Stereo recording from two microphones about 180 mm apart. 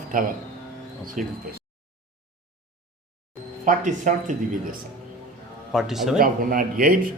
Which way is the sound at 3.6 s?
45° right (ahead or behind).